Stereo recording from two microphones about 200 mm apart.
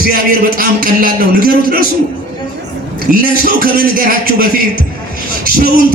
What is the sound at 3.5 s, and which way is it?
Speech, 45° right (ahead or behind).